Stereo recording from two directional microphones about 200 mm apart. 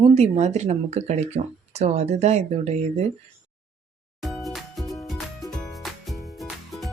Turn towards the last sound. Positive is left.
turn(degrees=0)  # may be behind; listen again after turning